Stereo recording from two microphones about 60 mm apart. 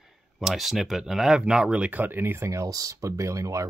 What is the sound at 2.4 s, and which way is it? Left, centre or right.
Speech, right.